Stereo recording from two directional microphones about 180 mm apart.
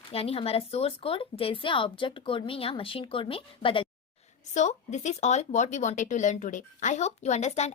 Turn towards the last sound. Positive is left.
turn(degrees=40)  # may be behind; listen again after turning